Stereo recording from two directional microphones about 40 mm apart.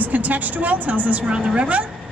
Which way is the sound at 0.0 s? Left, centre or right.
Right.